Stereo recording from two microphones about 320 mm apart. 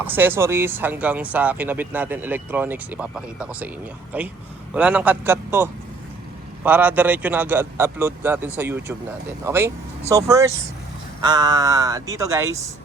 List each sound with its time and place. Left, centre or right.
0.0 s speech: centre